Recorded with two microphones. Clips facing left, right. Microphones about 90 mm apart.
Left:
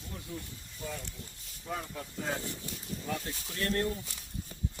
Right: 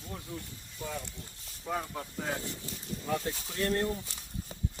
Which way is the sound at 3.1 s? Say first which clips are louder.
Right 5 dB; 30° right (ahead or behind).